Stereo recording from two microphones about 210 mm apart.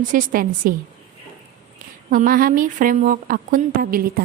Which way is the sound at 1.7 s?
40° right (ahead or behind).